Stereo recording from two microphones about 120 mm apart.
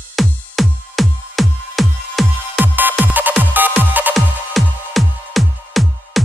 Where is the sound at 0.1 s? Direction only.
Centre (ahead or behind).